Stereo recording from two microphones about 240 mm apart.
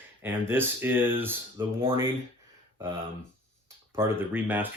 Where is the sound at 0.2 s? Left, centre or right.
Centre.